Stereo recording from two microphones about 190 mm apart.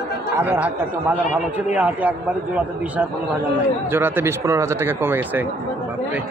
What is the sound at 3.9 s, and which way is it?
Speech, 10° right (ahead or behind).